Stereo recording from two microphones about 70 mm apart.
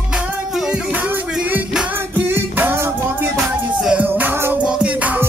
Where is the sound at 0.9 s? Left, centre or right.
Right.